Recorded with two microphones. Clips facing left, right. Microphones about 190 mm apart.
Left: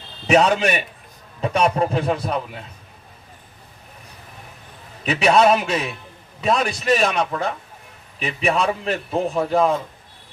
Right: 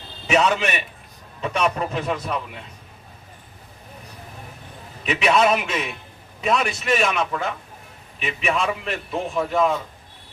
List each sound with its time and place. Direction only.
0.3 s a man's voice: 40° left (ahead or behind)
5.0 s a man's voice: 35° left (ahead or behind)